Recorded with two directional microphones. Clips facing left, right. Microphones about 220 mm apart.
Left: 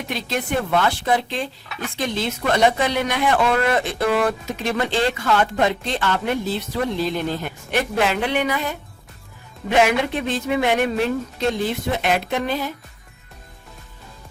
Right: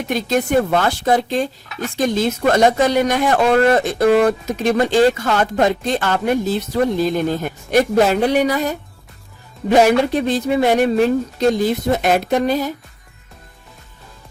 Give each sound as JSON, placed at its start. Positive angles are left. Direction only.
{"t": 0.1, "sound": "speech", "side_deg": -45}